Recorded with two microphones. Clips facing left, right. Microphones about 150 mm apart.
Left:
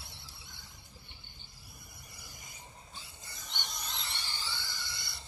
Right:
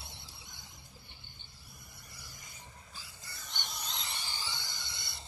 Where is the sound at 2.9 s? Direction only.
20° left (ahead or behind).